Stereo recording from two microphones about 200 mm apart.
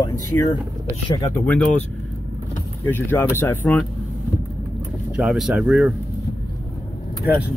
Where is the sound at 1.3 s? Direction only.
5° left (ahead or behind).